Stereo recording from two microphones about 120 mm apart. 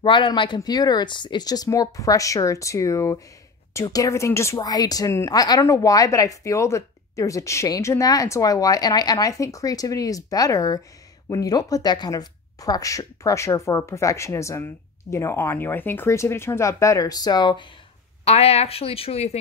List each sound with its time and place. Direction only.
0.0 s speech: 40° left (ahead or behind)
18.2 s speech: 60° left (ahead or behind)